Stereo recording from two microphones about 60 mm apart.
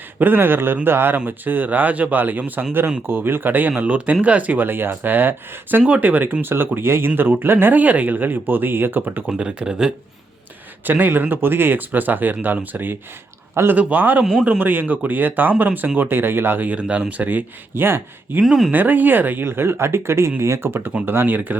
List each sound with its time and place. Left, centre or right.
0.2 s speech: right
9.4 s speech: centre
10.8 s speech: right
16.7 s speech: right
18.4 s speech: centre
18.7 s speech: right